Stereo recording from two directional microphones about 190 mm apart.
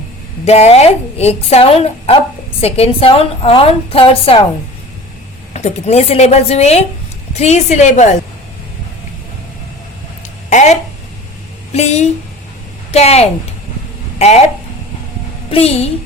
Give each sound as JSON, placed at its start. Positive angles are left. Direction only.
{"t": 0.4, "sound": "a woman's voice", "side_deg": 35}
{"t": 5.5, "sound": "a woman's voice", "side_deg": 35}
{"t": 10.5, "sound": "a sound", "side_deg": 40}
{"t": 11.7, "sound": "a woman's voice", "side_deg": 35}
{"t": 15.4, "sound": "a child's voice", "side_deg": 30}